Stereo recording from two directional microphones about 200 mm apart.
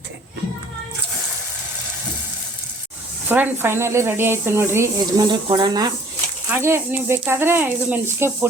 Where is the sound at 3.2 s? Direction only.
10° right (ahead or behind).